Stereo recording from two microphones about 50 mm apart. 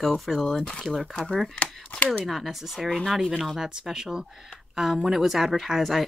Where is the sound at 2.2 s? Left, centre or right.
Centre.